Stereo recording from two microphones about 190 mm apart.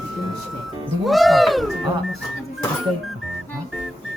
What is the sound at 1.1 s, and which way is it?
Speech, centre (ahead or behind).